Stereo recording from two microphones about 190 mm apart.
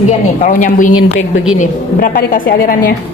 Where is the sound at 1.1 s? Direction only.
90° left.